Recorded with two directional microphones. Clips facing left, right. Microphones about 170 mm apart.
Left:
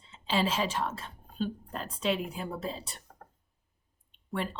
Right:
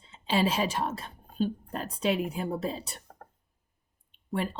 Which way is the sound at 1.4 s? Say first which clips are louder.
Right 4 dB; 45° right (ahead or behind).